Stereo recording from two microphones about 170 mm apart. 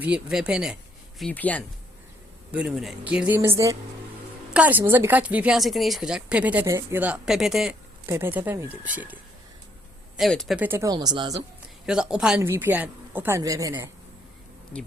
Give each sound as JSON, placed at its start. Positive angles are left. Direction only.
{"t": 0.0, "sound": "speech", "side_deg": -5}
{"t": 1.2, "sound": "speech", "side_deg": 10}
{"t": 2.5, "sound": "speech", "side_deg": -5}
{"t": 8.0, "sound": "speech", "side_deg": -15}
{"t": 10.2, "sound": "speech", "side_deg": 0}
{"t": 10.6, "sound": "speech", "side_deg": -15}
{"t": 11.9, "sound": "speech", "side_deg": -5}